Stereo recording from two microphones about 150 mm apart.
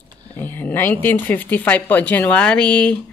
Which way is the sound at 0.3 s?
15° left (ahead or behind).